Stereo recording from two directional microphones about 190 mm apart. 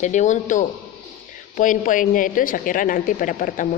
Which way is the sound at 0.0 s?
40° left (ahead or behind).